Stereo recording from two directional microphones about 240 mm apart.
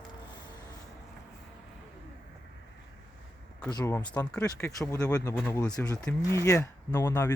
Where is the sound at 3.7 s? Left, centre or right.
Centre.